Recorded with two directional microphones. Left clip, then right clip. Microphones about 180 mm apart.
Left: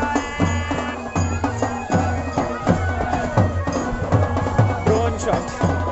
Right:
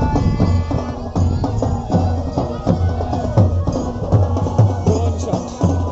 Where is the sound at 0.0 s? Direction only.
35° left (ahead or behind).